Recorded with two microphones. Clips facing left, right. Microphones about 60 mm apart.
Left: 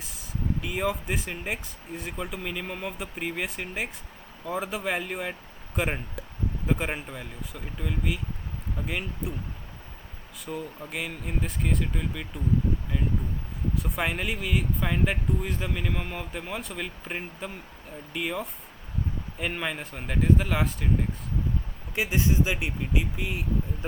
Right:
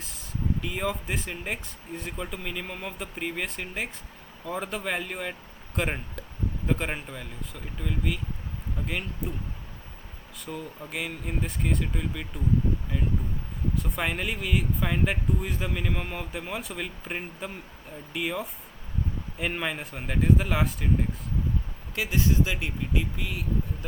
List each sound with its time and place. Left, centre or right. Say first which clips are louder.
0.6 s speech: left 2 dB; centre
10.4 s speech: left 2 dB; centre
13.7 s speech: left 1 dB; centre
21.9 s speech: even; left